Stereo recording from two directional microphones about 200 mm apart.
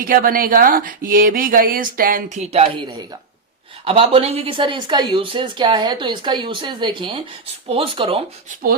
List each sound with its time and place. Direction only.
0.0 s speech: 45° right (ahead or behind); by 8.2 s 25° right (ahead or behind)